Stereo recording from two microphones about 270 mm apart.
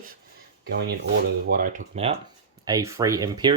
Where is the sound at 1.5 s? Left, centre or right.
Right.